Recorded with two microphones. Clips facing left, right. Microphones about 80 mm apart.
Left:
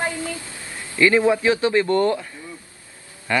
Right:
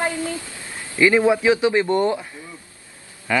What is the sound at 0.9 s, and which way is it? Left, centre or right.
Speech, centre.